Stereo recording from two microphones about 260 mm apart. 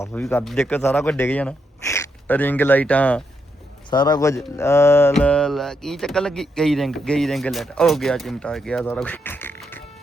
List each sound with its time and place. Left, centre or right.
0.0 s a man's voice: centre
3.8 s a man's voice: centre